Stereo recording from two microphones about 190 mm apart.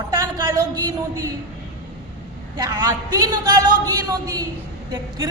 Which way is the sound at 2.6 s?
15° right (ahead or behind).